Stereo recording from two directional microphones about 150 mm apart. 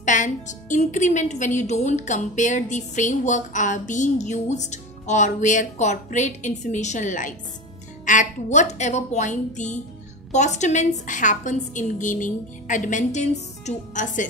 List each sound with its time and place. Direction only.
0.0 s a woman's voice: 55° left (ahead or behind)